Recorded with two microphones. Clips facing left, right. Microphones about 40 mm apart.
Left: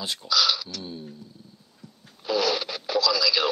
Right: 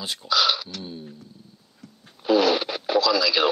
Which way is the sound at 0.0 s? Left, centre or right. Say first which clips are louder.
Even; centre.